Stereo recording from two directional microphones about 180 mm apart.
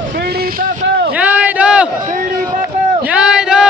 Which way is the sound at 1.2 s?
10° right (ahead or behind).